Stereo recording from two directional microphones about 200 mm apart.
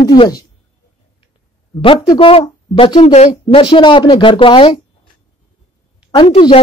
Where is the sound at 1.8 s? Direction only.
25° left (ahead or behind).